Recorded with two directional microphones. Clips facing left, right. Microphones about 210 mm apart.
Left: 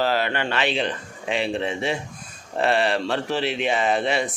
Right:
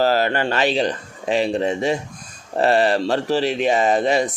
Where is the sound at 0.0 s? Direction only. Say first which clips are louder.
Right 5 dB; 40° right (ahead or behind).